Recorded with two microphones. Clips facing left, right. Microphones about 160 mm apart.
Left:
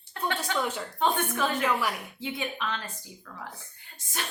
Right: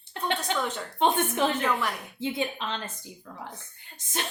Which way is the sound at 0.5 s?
10° left (ahead or behind).